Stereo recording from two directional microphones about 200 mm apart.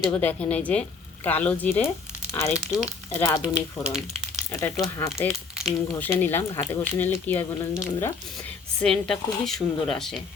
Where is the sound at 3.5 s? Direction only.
Centre (ahead or behind).